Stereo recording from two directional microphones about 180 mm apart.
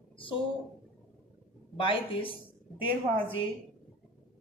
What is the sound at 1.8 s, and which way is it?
Speech, 30° left (ahead or behind).